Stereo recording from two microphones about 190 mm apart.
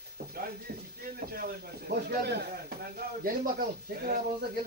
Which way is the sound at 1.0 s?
50° right (ahead or behind).